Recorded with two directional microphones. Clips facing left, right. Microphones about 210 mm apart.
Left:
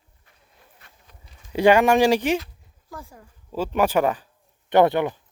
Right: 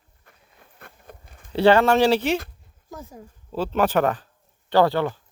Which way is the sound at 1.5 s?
15° left (ahead or behind).